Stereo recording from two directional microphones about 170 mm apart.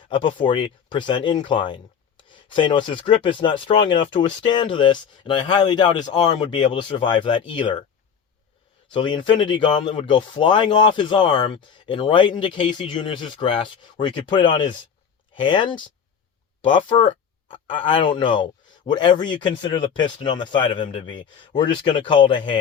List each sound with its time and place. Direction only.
0.1 s speech: 30° left (ahead or behind)
8.9 s speech: 30° left (ahead or behind)